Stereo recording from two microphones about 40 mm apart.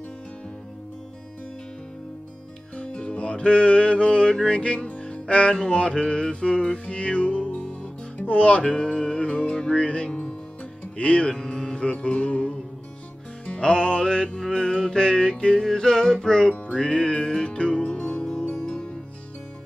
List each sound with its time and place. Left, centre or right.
2.7 s music: left
4.5 s speech: left
5.2 s music: left